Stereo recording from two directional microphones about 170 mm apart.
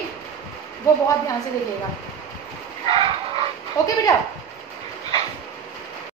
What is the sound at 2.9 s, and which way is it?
Bow-wow, 35° right (ahead or behind).